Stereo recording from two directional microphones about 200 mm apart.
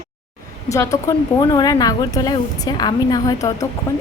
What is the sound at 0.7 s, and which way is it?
A woman's voice, 15° left (ahead or behind).